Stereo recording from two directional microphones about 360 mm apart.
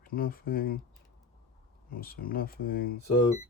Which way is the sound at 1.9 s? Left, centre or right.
Left.